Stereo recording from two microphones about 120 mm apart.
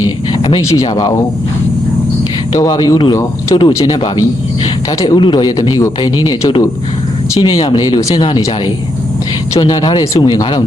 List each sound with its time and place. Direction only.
0.4 s a man's voice: 30° left (ahead or behind)
2.6 s a man's voice: 30° left (ahead or behind)